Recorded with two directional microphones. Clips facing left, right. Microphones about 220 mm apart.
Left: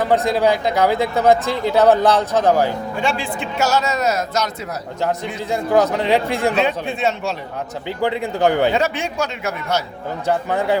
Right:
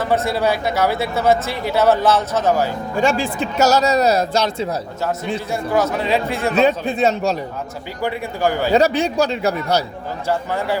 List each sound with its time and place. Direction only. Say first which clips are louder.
0.0 s speech: left 2 dB; 15° left (ahead or behind)
3.0 s speech: right 6 dB; 45° right (ahead or behind)
5.5 s speech: left 4 dB; 15° left (ahead or behind)
6.6 s speech: right 4 dB; 40° right (ahead or behind)
8.0 s speech: left 3 dB; 20° left (ahead or behind)
8.7 s speech: right 5 dB; 35° right (ahead or behind)
10.2 s speech: left 2 dB; 15° left (ahead or behind)